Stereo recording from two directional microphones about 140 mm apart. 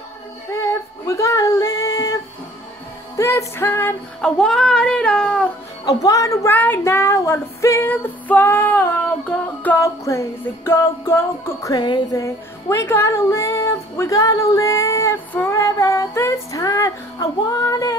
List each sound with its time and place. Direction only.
0.5 s music: 20° left (ahead or behind)
3.2 s music: 20° left (ahead or behind)
4.2 s music: 5° left (ahead or behind)
5.9 s child singing: 25° left (ahead or behind)
9.6 s a sound: 10° left (ahead or behind)
10.0 s child singing: 20° left (ahead or behind)
11.7 s music: 30° left (ahead or behind)